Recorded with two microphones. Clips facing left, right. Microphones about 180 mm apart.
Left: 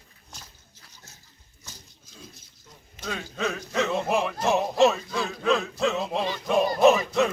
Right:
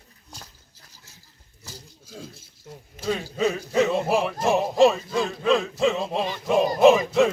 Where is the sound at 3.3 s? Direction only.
10° right (ahead or behind).